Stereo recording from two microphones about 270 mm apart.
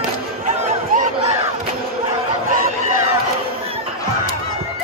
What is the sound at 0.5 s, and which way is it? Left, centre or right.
Chatter, right.